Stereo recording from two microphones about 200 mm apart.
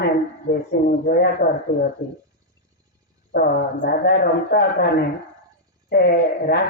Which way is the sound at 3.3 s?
55° left (ahead or behind).